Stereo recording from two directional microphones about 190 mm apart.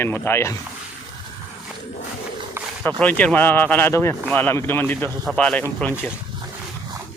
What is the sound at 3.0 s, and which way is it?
Speech, 5° left (ahead or behind).